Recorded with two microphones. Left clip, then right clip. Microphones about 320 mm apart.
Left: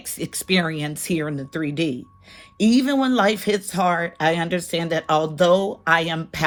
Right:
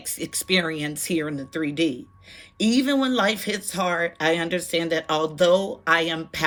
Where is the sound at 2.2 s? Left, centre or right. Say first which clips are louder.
Even; centre.